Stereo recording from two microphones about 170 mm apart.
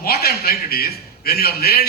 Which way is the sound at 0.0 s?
65° left (ahead or behind).